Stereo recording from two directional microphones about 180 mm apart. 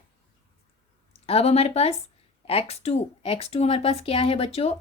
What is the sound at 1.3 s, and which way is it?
Speech, 35° left (ahead or behind).